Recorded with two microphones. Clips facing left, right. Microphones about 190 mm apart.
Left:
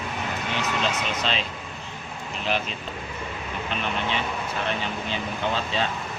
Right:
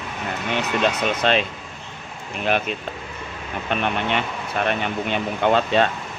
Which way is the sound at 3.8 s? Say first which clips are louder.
Right 4 dB; 60° right (ahead or behind).